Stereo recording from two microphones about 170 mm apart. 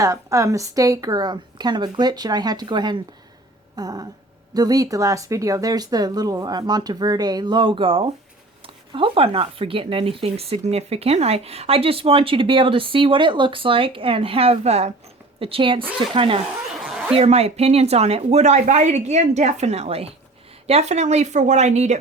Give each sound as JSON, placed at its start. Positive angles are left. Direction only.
{"t": 0.0, "sound": "speech", "side_deg": -20}
{"t": 16.7, "sound": "a sound", "side_deg": 0}
{"t": 17.2, "sound": "speech", "side_deg": -35}